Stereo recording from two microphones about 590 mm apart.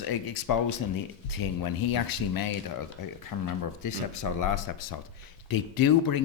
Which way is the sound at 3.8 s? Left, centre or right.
Left.